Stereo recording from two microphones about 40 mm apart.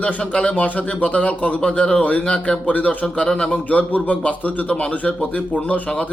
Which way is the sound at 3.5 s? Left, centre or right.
Left.